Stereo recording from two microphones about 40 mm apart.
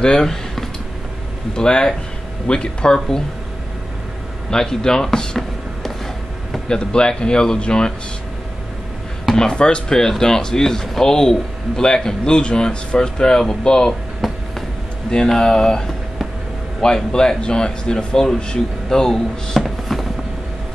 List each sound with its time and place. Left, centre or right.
0.0 s speech: centre
4.5 s speech: centre
6.7 s speech: left
9.4 s speech: centre
14.2 s a sound: centre
15.0 s speech: centre
16.8 s speech: centre
19.6 s music: centre